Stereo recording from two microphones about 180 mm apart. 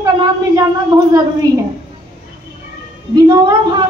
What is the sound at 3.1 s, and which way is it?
Speech, 25° right (ahead or behind).